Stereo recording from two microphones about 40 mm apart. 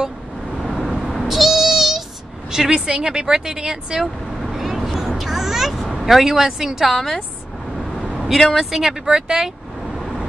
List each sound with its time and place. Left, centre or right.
0.7 s vehicle: centre
0.9 s meow: centre
2.5 s speech: centre
4.0 s vehicle: centre
8.5 s speech: centre
9.8 s vehicle: centre